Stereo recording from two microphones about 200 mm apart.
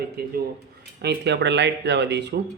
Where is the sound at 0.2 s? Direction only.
50° right (ahead or behind).